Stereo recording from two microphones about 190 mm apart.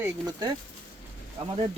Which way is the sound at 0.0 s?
20° right (ahead or behind).